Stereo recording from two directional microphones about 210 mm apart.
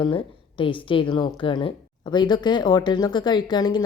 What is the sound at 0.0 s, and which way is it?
A woman's voice, 25° left (ahead or behind).